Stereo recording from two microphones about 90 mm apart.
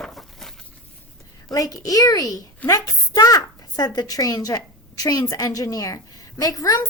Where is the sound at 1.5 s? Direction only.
40° left (ahead or behind).